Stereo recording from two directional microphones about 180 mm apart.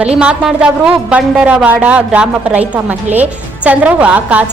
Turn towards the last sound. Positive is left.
turn(degrees=-5)  # may be behind; listen again after turning